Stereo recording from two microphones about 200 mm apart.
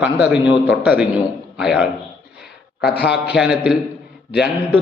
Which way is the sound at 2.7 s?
55° left (ahead or behind).